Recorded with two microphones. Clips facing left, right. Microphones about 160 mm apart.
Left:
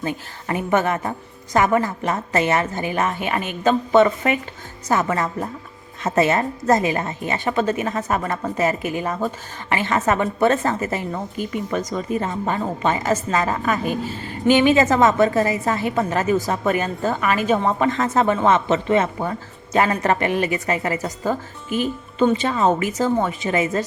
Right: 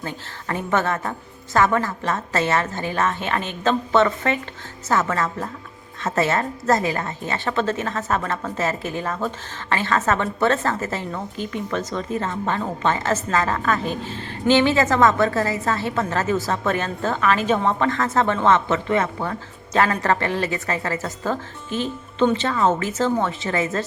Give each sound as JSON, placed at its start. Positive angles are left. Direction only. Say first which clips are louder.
{"t": 0.0, "sound": "a woman's voice", "louder": "left 4 dB", "side_deg": 15}